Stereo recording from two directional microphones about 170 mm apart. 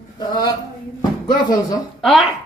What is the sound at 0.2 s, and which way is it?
Speech, 25° left (ahead or behind).